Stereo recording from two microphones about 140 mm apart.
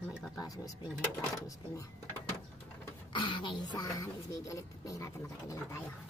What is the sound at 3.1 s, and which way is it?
A woman's voice, 35° left (ahead or behind).